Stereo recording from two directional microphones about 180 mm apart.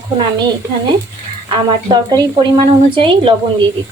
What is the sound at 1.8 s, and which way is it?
Speech, 20° right (ahead or behind).